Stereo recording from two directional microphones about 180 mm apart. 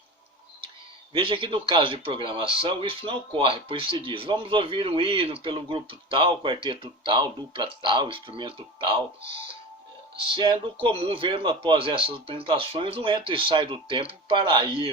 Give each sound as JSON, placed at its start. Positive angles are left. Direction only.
{"t": 1.1, "sound": "speech", "side_deg": -30}
{"t": 10.2, "sound": "speech", "side_deg": -30}